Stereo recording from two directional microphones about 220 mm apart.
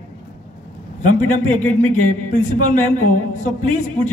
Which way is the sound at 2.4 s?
35° left (ahead or behind).